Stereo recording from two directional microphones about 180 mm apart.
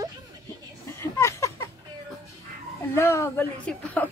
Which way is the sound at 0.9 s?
15° left (ahead or behind).